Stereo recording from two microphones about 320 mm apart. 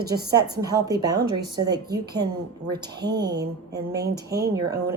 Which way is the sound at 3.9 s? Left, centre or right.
Right.